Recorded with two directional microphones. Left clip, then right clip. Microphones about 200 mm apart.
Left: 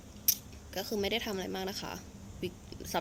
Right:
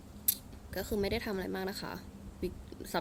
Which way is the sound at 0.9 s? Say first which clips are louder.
Left 1 dB; 10° right (ahead or behind).